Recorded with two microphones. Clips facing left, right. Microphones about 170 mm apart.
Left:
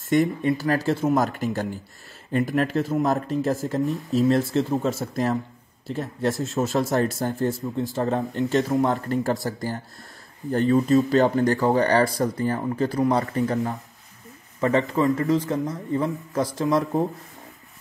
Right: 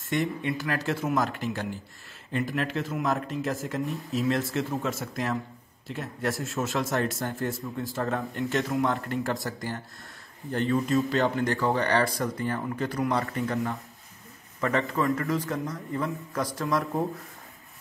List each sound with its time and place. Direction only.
0.1 s speech: 40° left (ahead or behind); by 6.6 s 25° left (ahead or behind)
6.6 s speech: 35° left (ahead or behind)
7.3 s speech: 25° left (ahead or behind)
8.5 s a man's voice: 35° left (ahead or behind)
15.0 s speech: 20° left (ahead or behind)